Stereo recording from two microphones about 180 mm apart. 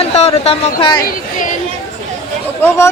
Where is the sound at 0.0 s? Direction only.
35° left (ahead or behind).